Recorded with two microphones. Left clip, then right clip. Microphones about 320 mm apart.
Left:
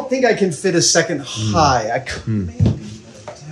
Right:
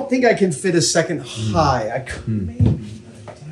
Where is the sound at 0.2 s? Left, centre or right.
Centre.